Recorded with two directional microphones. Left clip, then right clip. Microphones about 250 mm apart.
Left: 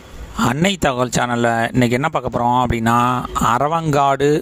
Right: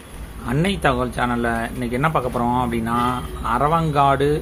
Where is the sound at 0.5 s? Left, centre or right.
Left.